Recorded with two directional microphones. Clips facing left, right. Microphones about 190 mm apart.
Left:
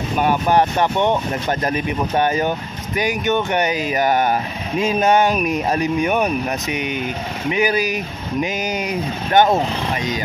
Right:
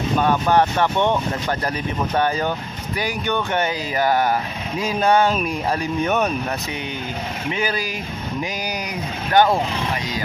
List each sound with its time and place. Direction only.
0.2 s speech: 15° left (ahead or behind)